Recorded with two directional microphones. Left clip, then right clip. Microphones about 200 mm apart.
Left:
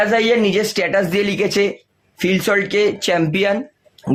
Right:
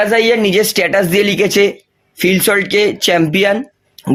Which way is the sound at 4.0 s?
40° right (ahead or behind).